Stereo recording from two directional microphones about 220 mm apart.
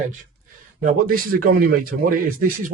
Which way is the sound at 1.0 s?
40° right (ahead or behind).